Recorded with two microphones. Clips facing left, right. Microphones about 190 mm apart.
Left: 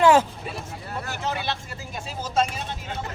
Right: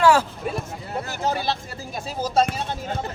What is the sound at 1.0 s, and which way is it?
Speech, 40° right (ahead or behind).